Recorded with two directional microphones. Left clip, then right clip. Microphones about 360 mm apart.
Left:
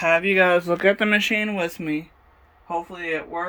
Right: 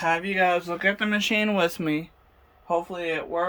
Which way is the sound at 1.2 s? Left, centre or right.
Centre.